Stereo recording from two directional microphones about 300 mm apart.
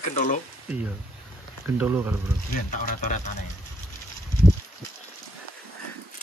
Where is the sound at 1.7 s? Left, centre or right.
Centre.